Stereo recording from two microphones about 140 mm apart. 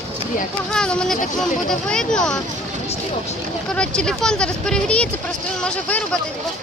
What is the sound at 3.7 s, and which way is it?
Speech, 5° left (ahead or behind).